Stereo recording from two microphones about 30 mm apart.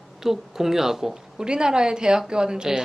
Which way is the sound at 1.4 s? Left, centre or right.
Right.